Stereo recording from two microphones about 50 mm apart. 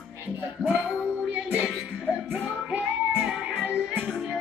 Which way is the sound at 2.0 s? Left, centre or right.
Right.